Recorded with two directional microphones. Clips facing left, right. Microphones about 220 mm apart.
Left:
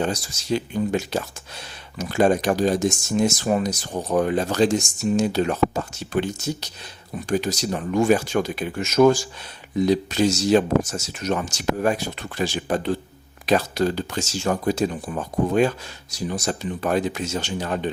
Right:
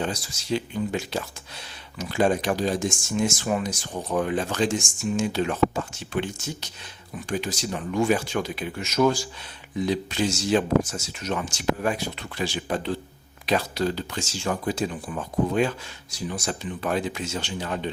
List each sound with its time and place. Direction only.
0.0 s speech: 45° left (ahead or behind)